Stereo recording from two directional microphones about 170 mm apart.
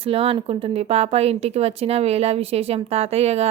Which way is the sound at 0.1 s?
35° right (ahead or behind).